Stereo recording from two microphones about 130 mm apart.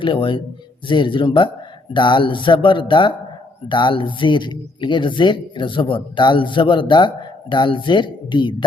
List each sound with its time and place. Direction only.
0.0 s speech: 40° left (ahead or behind)